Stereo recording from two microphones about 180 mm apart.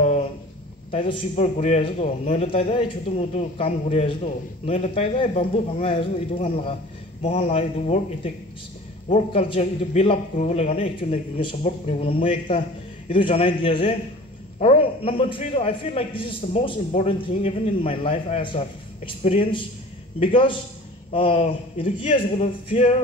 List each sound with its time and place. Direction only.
0.9 s a man's voice: 30° left (ahead or behind)